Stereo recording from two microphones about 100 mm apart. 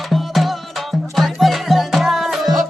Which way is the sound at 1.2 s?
Centre (ahead or behind).